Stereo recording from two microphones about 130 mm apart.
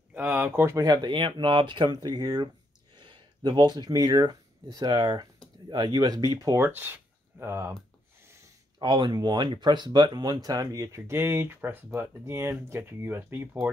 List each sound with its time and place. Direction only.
0.1 s speech: 15° right (ahead or behind)
8.7 s speech: 35° right (ahead or behind); by 13.7 s 15° right (ahead or behind)